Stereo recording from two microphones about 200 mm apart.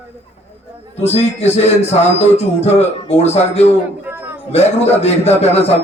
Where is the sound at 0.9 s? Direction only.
30° left (ahead or behind).